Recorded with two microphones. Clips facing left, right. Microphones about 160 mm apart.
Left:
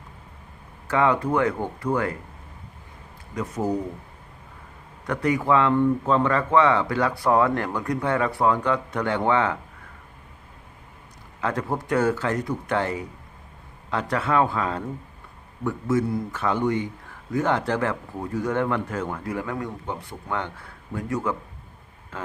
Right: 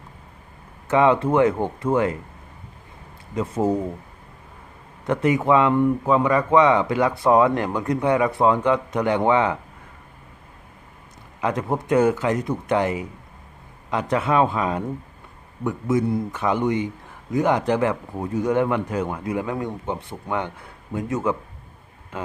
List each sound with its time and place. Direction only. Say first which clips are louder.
0.9 s a man's voice: right 4 dB; 20° right (ahead or behind)
3.3 s a man's voice: right 4 dB; 30° right (ahead or behind)
5.0 s a man's voice: right 3 dB; 20° right (ahead or behind)
11.3 s a man's voice: right 3 dB; 20° right (ahead or behind)